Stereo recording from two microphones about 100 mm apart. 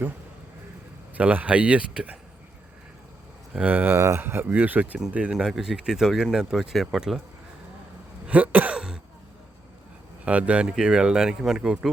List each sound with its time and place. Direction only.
1.1 s speech: 15° right (ahead or behind)
3.5 s speech: 15° right (ahead or behind)
8.3 s throat clearing: 15° right (ahead or behind)
10.2 s speech: 10° right (ahead or behind)